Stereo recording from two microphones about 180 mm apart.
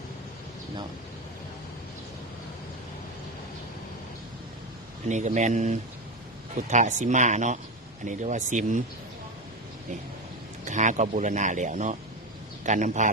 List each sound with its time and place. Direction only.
5.0 s speech: 40° right (ahead or behind)
10.7 s speech: 45° right (ahead or behind)